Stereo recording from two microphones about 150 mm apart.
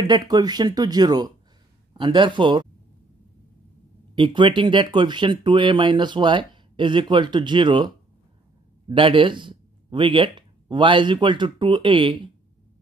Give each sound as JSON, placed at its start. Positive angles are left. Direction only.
{"t": 0.0, "sound": "speech", "side_deg": -25}
{"t": 4.1, "sound": "speech", "side_deg": -30}